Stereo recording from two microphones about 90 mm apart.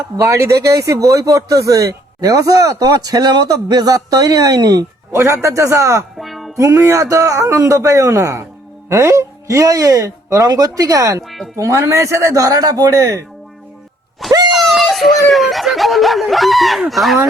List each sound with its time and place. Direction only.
0.2 s speech: 35° right (ahead or behind)
5.1 s speech: 30° right (ahead or behind)
6.1 s music: centre (ahead or behind)
6.6 s speech: 35° right (ahead or behind)
11.2 s speech: centre (ahead or behind)
11.5 s speech: 35° right (ahead or behind)
14.5 s speech: centre (ahead or behind)